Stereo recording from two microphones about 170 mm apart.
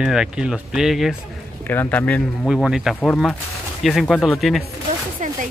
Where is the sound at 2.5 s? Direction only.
5° right (ahead or behind).